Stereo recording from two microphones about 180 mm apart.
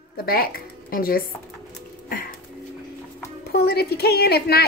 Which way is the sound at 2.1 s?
50° left (ahead or behind).